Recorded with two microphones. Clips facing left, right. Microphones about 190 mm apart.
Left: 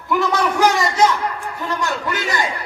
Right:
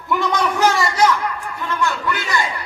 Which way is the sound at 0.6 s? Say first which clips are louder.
Left 1 dB; 15° left (ahead or behind).